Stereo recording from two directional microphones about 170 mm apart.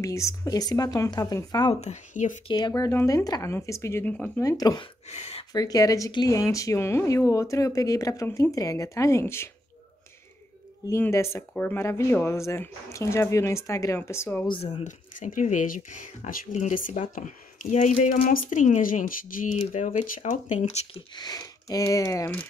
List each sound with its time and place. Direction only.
0.0 s speech: 15° left (ahead or behind)
1.8 s speech: 45° left (ahead or behind)
2.4 s speech: 25° left (ahead or behind); by 4.3 s 10° left (ahead or behind)
4.4 s speech: 20° left (ahead or behind)
5.1 s speech: 40° left (ahead or behind)
5.5 s speech: 20° left (ahead or behind)
10.9 s speech: 15° left (ahead or behind)
14.5 s speech: 40° left (ahead or behind)
21.2 s speech: 20° left (ahead or behind)